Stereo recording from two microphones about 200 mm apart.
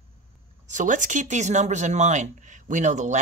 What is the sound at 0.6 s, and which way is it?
Speech, 40° right (ahead or behind).